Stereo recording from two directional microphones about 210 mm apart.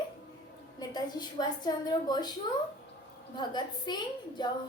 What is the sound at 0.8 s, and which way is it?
A woman's voice, 20° left (ahead or behind).